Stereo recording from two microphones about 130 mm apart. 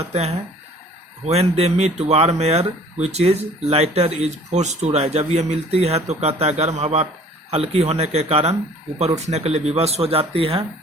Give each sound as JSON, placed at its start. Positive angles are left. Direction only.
{"t": 0.0, "sound": "speech", "side_deg": -55}